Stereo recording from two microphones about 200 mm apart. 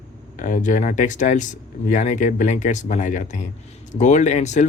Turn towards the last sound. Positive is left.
turn(degrees=35)  # may be behind; listen again after turning